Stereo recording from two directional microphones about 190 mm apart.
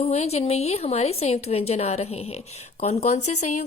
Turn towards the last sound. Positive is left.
turn(degrees=40)  # may be behind; listen again after turning